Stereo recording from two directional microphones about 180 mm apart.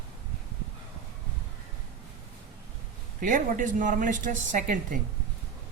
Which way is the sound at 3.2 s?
50° right (ahead or behind).